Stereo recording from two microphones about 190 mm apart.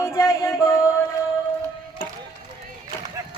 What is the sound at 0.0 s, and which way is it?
Music, 15° left (ahead or behind).